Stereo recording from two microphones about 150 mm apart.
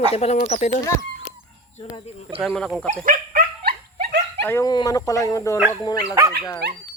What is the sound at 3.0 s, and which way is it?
Dog, 70° right (ahead or behind).